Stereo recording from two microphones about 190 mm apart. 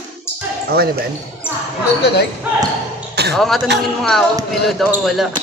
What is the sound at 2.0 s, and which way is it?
Speech, 60° left (ahead or behind).